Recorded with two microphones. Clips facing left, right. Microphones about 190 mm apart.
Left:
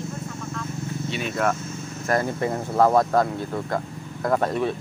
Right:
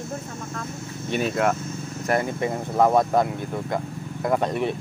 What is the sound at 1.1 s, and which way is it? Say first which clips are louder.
Speech: right 7 dB; 40° right (ahead or behind).